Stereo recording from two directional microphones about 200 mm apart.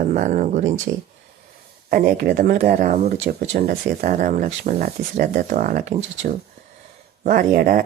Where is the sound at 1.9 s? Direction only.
45° right (ahead or behind).